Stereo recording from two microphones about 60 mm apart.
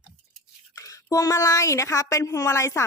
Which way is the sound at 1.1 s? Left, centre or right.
Left.